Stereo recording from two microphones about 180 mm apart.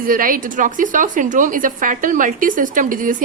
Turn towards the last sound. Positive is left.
turn(degrees=-50)  # may be behind; listen again after turning